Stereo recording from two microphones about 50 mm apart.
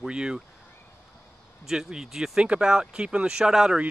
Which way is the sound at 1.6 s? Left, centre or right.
Centre.